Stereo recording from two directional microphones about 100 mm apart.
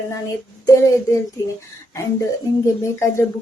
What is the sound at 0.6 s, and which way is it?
Speech, 30° left (ahead or behind).